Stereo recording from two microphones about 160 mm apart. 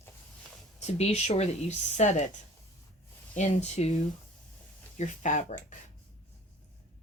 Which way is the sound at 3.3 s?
45° left (ahead or behind).